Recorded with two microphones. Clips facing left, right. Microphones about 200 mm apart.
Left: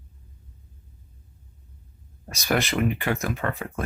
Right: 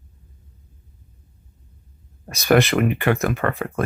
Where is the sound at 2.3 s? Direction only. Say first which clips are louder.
Right 7 dB; 65° right (ahead or behind).